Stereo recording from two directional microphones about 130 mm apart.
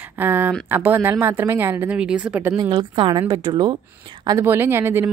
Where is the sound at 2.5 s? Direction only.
35° right (ahead or behind).